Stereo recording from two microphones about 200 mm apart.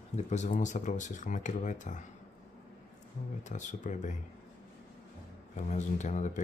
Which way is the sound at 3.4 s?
35° left (ahead or behind).